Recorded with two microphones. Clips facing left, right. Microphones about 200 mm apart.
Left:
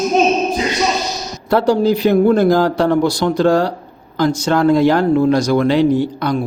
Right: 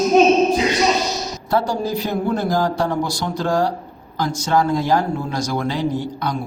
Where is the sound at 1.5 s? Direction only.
70° left (ahead or behind).